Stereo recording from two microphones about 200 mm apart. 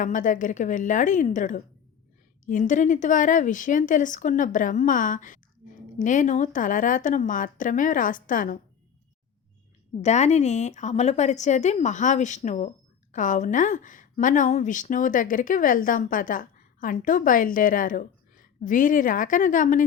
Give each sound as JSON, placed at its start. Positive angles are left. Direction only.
{"t": 0.0, "sound": "a woman's voice", "side_deg": 40}
{"t": 10.0, "sound": "a woman's voice", "side_deg": 35}